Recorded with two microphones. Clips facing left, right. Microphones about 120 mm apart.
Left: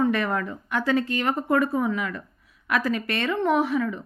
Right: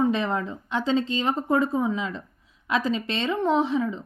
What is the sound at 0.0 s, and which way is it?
Speech, 20° right (ahead or behind).